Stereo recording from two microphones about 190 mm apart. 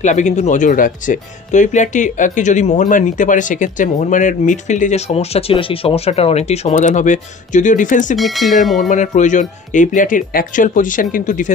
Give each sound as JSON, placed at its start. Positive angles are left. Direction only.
{"t": 0.0, "sound": "speech", "side_deg": 40}
{"t": 8.2, "sound": "speech", "side_deg": 0}
{"t": 8.7, "sound": "speech", "side_deg": 40}